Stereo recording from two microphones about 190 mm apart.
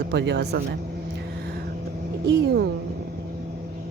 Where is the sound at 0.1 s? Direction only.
60° right (ahead or behind).